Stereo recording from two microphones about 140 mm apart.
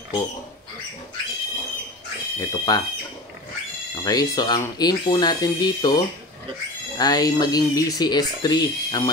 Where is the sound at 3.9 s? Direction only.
25° left (ahead or behind).